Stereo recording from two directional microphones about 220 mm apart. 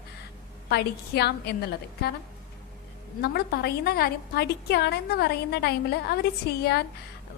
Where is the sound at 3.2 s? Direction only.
45° left (ahead or behind).